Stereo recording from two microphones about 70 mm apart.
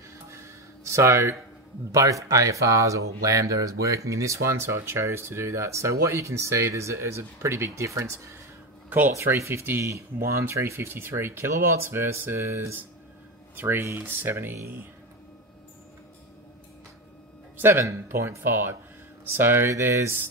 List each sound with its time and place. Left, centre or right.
0.3 s music: right
1.9 s speech: right
8.9 s speech: right
17.6 s speech: right